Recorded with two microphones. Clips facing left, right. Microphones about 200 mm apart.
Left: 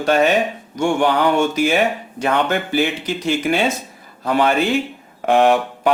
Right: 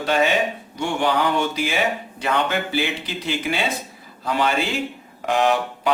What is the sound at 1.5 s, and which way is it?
Speech, 45° left (ahead or behind).